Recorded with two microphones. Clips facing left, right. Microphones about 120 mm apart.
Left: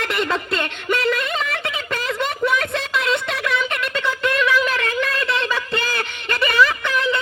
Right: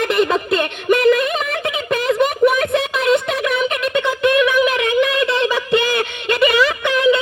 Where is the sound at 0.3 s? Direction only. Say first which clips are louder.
Right 5 dB; 15° right (ahead or behind).